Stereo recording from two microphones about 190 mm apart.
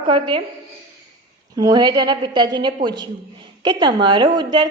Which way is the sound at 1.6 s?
20° right (ahead or behind).